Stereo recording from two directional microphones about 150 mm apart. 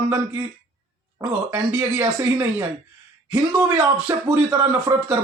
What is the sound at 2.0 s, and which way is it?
Speech, 20° right (ahead or behind).